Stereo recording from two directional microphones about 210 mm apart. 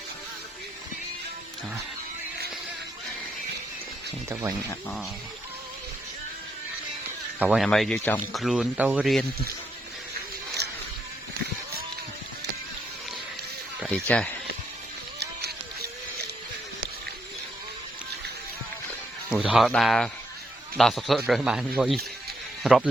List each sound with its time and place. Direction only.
4.3 s speech: 10° right (ahead or behind)
7.3 s a man's voice: 5° right (ahead or behind)
10.6 s a sound: 50° right (ahead or behind)
14.1 s speech: 5° left (ahead or behind)
15.2 s a sound: 50° right (ahead or behind)
19.3 s a man's voice: 5° right (ahead or behind)